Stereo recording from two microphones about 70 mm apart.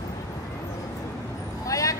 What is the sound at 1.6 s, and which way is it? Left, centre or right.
Vehicle, left.